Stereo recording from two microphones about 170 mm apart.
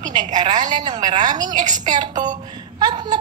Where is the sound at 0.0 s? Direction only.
25° right (ahead or behind).